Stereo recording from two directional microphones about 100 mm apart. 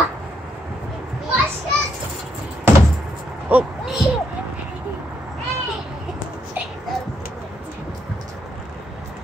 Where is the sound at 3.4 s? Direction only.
10° right (ahead or behind).